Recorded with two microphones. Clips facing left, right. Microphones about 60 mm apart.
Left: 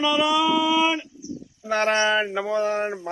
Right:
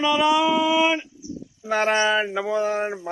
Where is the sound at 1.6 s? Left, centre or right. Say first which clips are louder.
Right 1 dB; centre.